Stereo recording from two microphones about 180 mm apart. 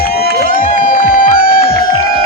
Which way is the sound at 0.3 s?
50° left (ahead or behind).